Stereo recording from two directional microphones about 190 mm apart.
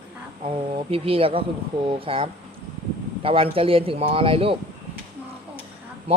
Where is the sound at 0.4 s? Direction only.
30° right (ahead or behind).